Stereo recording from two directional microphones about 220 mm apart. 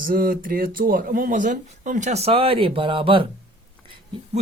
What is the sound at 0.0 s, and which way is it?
Speech, 40° right (ahead or behind).